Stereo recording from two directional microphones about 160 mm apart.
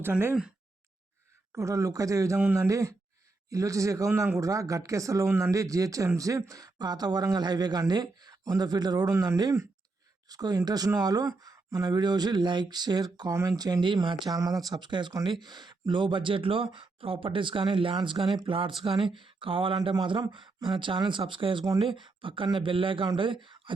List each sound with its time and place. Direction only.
0.0 s speech: 15° right (ahead or behind)
1.5 s speech: 20° right (ahead or behind)